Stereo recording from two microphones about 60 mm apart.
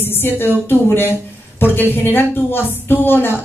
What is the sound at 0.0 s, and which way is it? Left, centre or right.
A woman's voice, left.